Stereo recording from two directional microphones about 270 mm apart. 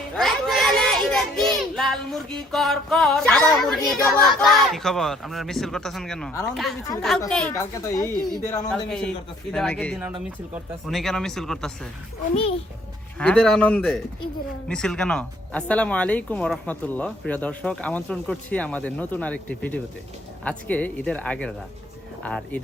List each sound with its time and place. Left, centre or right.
0.1 s a child's voice: centre
12.3 s a child's voice: left
13.1 s speech: centre